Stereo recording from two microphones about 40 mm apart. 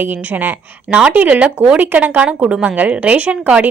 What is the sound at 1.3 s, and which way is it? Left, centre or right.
Speech, right.